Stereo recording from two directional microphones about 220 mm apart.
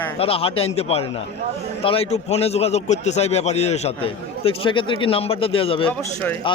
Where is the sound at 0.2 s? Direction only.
25° left (ahead or behind).